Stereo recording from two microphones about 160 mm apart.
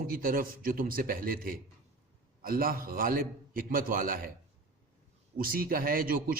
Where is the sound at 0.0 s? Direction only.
65° right (ahead or behind).